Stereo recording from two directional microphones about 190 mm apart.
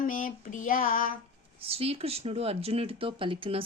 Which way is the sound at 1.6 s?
30° right (ahead or behind).